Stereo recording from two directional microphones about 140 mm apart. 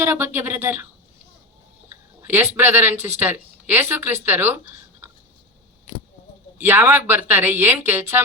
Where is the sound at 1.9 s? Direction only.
15° right (ahead or behind).